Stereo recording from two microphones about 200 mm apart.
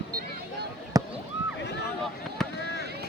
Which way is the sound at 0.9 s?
15° right (ahead or behind).